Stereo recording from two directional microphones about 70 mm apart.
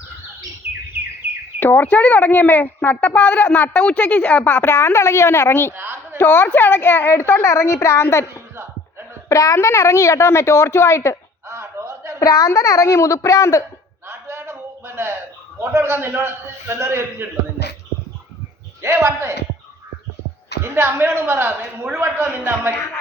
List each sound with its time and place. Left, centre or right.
1.5 s speech: left
4.4 s a woman's voice: left
5.7 s a sound: right
6.1 s a woman's voice: left
8.3 s a sound: right
9.3 s a woman's voice: left
11.4 s a sound: right
12.2 s a woman's voice: left
14.1 s a sound: right
15.7 s a man's voice: right
18.8 s a man's voice: right
20.7 s a man's voice: right